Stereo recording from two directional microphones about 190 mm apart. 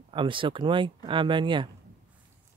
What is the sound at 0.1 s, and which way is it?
Speech, 25° right (ahead or behind).